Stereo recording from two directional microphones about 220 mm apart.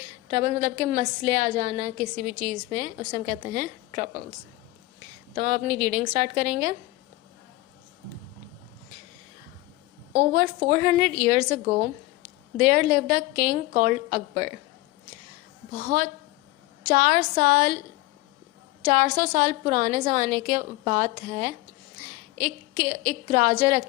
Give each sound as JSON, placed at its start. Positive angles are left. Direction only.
{"t": 0.3, "sound": "a woman's voice", "side_deg": -40}
{"t": 5.3, "sound": "a woman's voice", "side_deg": -40}
{"t": 10.1, "sound": "a woman's voice", "side_deg": -40}
{"t": 15.7, "sound": "a woman's voice", "side_deg": -40}
{"t": 18.9, "sound": "a woman's voice", "side_deg": -40}